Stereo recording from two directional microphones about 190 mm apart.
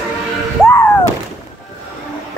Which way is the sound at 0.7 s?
10° left (ahead or behind).